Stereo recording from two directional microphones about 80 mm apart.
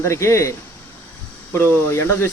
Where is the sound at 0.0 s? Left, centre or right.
Left.